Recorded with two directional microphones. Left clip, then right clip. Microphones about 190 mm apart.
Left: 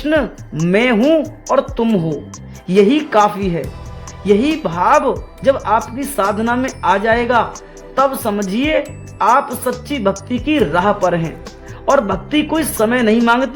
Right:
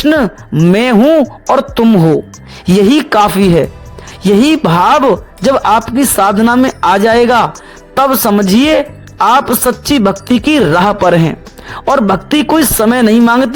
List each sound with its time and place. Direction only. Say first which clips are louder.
0.0 s a woman's voice: right 6 dB; 40° right (ahead or behind)